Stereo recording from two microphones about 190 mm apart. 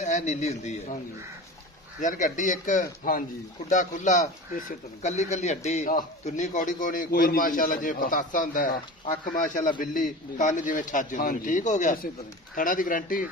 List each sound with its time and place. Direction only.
0.0 s speech: 40° left (ahead or behind)
2.0 s a man's voice: 40° left (ahead or behind)